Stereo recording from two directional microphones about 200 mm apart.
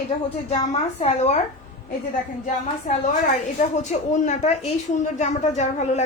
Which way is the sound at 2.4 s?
40° left (ahead or behind).